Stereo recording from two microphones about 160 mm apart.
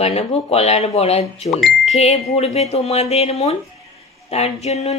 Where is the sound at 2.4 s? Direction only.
40° left (ahead or behind).